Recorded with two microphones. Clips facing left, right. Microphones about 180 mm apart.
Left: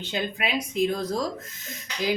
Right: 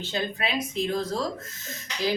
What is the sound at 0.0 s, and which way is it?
Speech, 15° left (ahead or behind).